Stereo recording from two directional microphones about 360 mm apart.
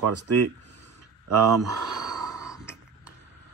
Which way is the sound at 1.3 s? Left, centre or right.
Right.